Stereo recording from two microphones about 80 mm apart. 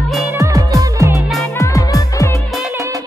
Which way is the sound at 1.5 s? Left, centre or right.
Left.